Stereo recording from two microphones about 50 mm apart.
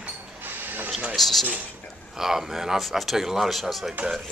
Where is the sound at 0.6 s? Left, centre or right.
Right.